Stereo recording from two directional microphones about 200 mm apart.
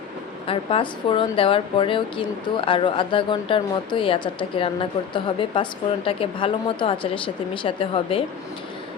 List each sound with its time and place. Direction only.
0.4 s speech: 25° left (ahead or behind)